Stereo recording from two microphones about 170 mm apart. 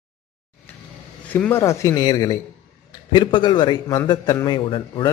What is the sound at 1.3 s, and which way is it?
A man's voice, 10° left (ahead or behind).